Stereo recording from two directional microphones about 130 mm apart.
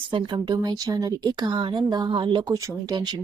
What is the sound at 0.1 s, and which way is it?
A woman's voice, 40° right (ahead or behind).